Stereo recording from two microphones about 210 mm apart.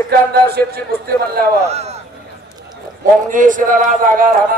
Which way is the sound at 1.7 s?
30° right (ahead or behind).